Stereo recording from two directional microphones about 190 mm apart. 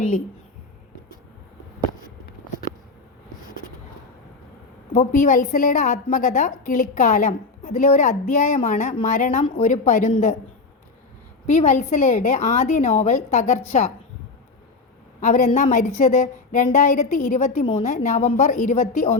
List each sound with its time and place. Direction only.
4.9 s a woman's voice: 40° left (ahead or behind)
11.4 s a woman's voice: 40° left (ahead or behind)
15.2 s a woman's voice: 40° left (ahead or behind)